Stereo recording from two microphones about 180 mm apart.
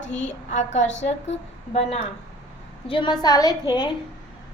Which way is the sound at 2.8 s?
30° left (ahead or behind).